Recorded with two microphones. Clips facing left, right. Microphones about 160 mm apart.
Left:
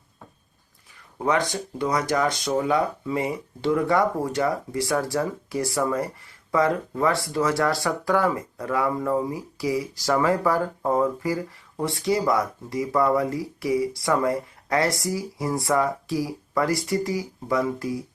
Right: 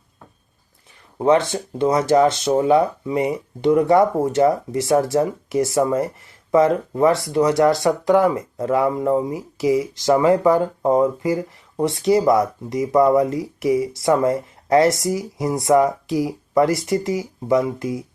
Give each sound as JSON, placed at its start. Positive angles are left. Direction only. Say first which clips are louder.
{"t": 1.2, "sound": "speech", "louder": "right 7 dB", "side_deg": -25}